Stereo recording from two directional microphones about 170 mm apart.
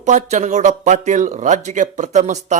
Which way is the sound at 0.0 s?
45° right (ahead or behind).